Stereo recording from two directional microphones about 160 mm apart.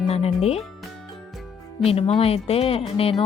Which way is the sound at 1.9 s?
35° left (ahead or behind).